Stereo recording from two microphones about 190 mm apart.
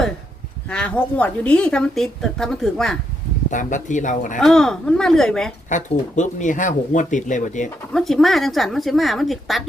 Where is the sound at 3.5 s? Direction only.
40° left (ahead or behind).